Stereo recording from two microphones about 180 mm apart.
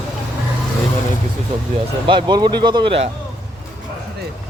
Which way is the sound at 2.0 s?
25° right (ahead or behind).